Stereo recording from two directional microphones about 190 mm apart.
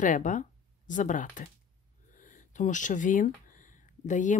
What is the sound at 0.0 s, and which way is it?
A woman's voice, 40° left (ahead or behind).